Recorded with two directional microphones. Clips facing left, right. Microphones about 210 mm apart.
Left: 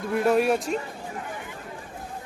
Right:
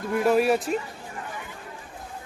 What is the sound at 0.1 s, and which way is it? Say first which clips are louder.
Speech: right 1 dB; centre (ahead or behind).